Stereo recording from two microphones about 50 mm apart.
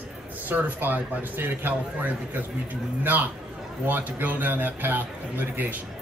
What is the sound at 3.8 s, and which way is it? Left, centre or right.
A man's voice, right.